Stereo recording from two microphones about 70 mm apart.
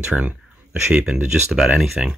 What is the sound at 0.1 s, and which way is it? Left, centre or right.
Speech, centre.